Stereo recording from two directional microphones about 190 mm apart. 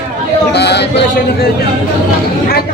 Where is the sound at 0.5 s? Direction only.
60° left (ahead or behind).